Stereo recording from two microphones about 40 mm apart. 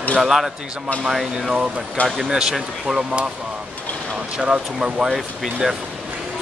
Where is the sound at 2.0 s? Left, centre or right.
Left.